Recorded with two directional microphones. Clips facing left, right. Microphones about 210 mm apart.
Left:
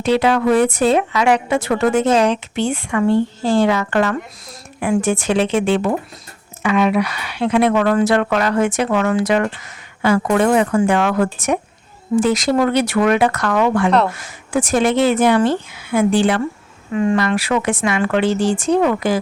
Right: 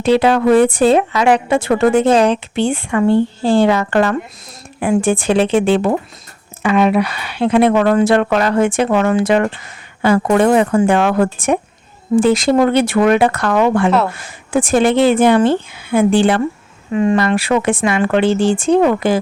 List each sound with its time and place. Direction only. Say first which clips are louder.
0.0 s speech: right 3 dB; 30° right (ahead or behind)